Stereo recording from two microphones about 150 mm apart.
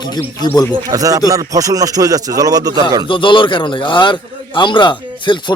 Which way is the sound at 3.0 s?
35° left (ahead or behind).